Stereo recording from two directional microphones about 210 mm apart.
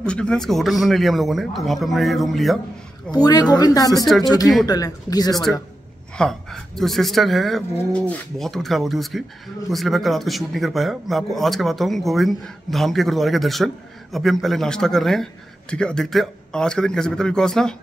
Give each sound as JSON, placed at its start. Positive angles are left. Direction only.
{"t": 0.0, "sound": "a man's voice", "side_deg": 5}
{"t": 3.1, "sound": "speech", "side_deg": 20}
{"t": 6.1, "sound": "a man's voice", "side_deg": 5}